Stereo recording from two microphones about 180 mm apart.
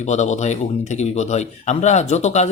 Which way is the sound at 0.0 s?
40° left (ahead or behind).